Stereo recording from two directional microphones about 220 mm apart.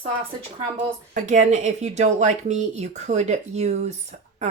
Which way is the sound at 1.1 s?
35° right (ahead or behind).